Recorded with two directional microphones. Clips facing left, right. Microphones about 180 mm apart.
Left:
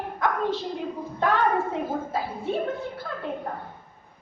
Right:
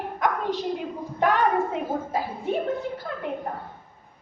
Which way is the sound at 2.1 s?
15° right (ahead or behind).